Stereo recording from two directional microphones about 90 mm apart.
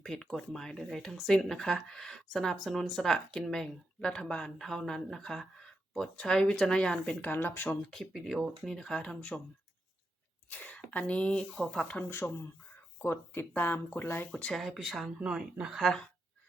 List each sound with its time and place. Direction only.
0.0 s speech: 5° left (ahead or behind); by 7.8 s 20° left (ahead or behind)
7.9 s speech: centre (ahead or behind)
8.6 s speech: 5° left (ahead or behind)
10.5 s speech: 15° left (ahead or behind)
12.0 s speech: 25° left (ahead or behind)
14.3 s speech: 5° left (ahead or behind)
15.8 s speech: 5° left (ahead or behind)